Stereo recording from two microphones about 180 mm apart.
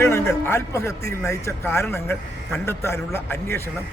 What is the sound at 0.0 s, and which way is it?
A man's voice, 15° left (ahead or behind).